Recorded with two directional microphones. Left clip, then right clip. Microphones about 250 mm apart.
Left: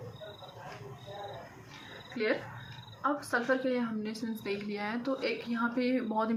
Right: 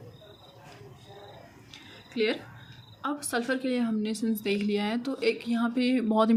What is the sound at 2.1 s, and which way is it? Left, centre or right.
A woman's voice, right.